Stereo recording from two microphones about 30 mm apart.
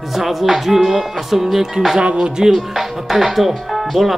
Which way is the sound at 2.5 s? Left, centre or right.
Centre.